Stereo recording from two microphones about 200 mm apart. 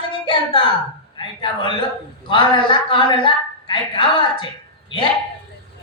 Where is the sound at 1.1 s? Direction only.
25° left (ahead or behind).